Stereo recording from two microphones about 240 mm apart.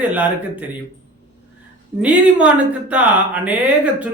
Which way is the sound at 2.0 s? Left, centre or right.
Centre.